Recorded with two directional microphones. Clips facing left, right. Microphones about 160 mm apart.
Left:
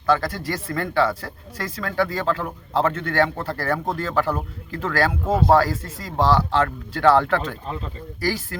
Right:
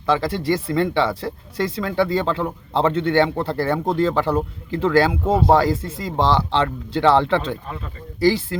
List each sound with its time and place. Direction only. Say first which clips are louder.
0.0 s speech: right 1 dB; 25° right (ahead or behind)